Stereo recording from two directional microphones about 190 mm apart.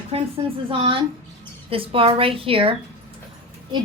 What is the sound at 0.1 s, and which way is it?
A woman's voice, 30° right (ahead or behind).